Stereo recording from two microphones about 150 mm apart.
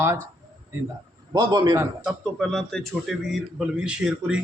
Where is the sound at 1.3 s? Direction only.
25° right (ahead or behind).